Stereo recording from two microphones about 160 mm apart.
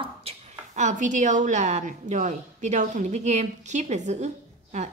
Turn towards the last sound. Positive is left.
turn(degrees=-45)  # may be behind; listen again after turning